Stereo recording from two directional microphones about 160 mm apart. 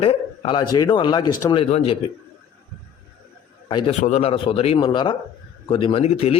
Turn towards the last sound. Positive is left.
turn(degrees=40)  # may be behind; listen again after turning